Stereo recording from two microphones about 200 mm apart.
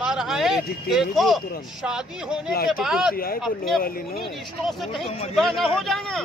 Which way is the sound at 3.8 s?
45° left (ahead or behind).